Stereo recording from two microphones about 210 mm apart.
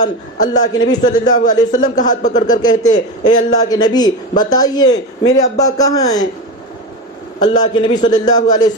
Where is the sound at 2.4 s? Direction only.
20° left (ahead or behind).